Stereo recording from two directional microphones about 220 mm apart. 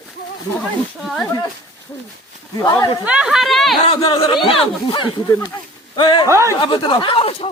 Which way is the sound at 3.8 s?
20° left (ahead or behind).